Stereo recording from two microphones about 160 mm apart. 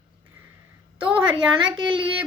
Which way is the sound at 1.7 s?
30° right (ahead or behind).